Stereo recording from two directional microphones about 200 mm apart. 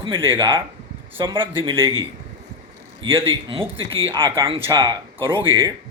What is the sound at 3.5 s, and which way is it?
Speech, 30° right (ahead or behind).